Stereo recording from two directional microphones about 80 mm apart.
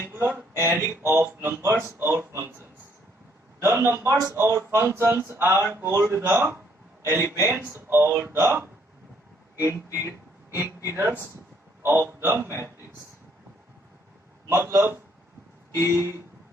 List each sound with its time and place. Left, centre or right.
0.1 s speech: right
7.0 s speech: right
14.5 s speech: right